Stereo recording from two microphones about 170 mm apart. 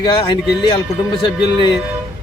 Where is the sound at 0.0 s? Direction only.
30° left (ahead or behind).